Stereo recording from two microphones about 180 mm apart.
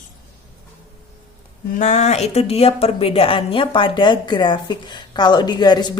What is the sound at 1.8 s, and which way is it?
A woman's voice, 40° left (ahead or behind).